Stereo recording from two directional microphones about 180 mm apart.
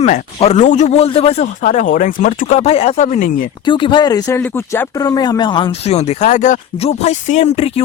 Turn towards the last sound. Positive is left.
turn(degrees=35)  # may be behind; listen again after turning